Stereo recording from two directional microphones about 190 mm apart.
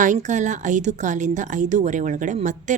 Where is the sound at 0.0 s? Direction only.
40° right (ahead or behind).